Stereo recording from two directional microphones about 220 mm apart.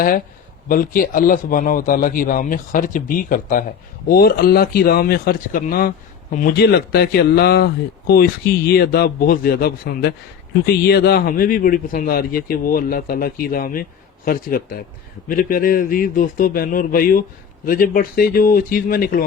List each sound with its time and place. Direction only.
0.7 s speech: 40° left (ahead or behind)